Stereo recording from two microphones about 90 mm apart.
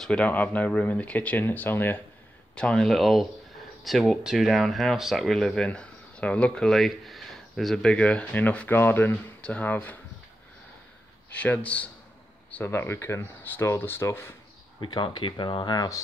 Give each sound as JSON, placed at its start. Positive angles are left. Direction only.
{"t": 0.0, "sound": "speech", "side_deg": 15}
{"t": 2.5, "sound": "speech", "side_deg": 10}
{"t": 11.3, "sound": "speech", "side_deg": 15}
{"t": 12.4, "sound": "a sound", "side_deg": 15}
{"t": 12.7, "sound": "speech", "side_deg": 25}
{"t": 14.8, "sound": "speech", "side_deg": 60}